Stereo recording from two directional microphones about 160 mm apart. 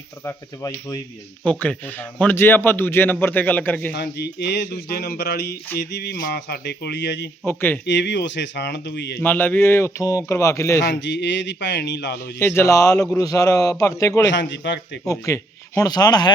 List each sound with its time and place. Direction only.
0.3 s a man's voice: 20° left (ahead or behind)
1.5 s a man's voice: 10° left (ahead or behind)
3.9 s speech: 90° left
7.4 s a man's voice: 15° left (ahead or behind)
7.9 s speech: 90° left
9.2 s a man's voice: 10° left (ahead or behind)
10.8 s speech: 90° left
12.4 s a man's voice: 15° left (ahead or behind)
14.3 s speech: 90° left
15.0 s a man's voice: 20° left (ahead or behind)